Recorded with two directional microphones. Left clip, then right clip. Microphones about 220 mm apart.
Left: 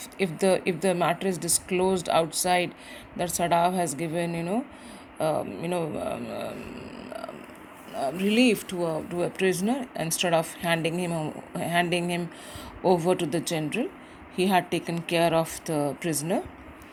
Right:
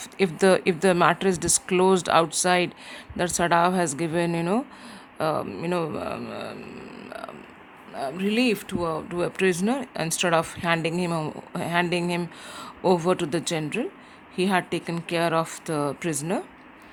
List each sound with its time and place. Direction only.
0.2 s speech: 20° right (ahead or behind)